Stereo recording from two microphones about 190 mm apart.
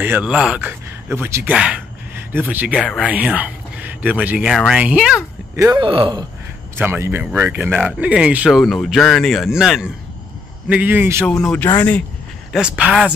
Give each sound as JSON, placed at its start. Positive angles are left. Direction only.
{"t": 0.0, "sound": "speech", "side_deg": -10}
{"t": 2.8, "sound": "speech", "side_deg": 5}
{"t": 3.1, "sound": "speech", "side_deg": -10}
{"t": 5.7, "sound": "speech", "side_deg": -25}
{"t": 6.8, "sound": "speech", "side_deg": -10}
{"t": 11.4, "sound": "speech", "side_deg": 10}
{"t": 12.5, "sound": "speech", "side_deg": -5}